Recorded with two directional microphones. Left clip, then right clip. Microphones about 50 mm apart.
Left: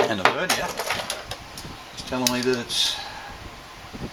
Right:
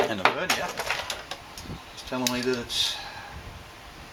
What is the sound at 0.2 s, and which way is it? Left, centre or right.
Speech, centre.